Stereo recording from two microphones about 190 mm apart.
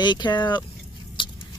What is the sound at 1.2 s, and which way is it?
Patter, 25° left (ahead or behind).